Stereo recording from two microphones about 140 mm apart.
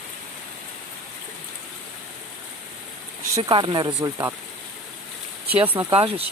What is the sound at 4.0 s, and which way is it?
Speech, 20° right (ahead or behind).